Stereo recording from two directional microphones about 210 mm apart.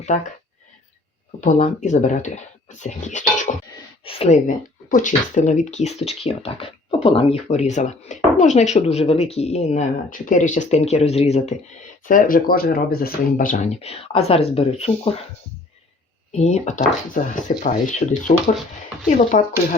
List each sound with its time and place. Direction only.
1.4 s speech: 35° left (ahead or behind)
16.4 s speech: 30° left (ahead or behind)